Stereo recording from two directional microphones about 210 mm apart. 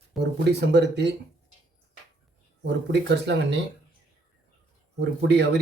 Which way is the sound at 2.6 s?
55° right (ahead or behind).